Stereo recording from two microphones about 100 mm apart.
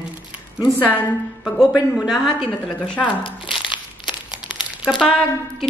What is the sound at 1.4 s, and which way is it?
Speech, 5° right (ahead or behind).